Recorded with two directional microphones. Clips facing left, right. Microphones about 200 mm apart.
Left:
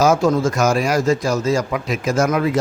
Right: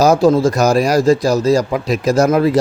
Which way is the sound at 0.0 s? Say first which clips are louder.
Right 4 dB; 35° right (ahead or behind).